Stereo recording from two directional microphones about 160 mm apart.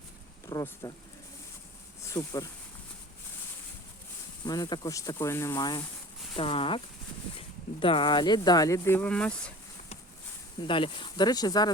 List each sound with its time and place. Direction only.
0.4 s speech: 20° left (ahead or behind)
2.0 s speech: 20° left (ahead or behind)
4.4 s speech: 25° left (ahead or behind)
6.3 s speech: 35° left (ahead or behind); by 9.5 s 5° left (ahead or behind)
10.7 s speech: 30° left (ahead or behind)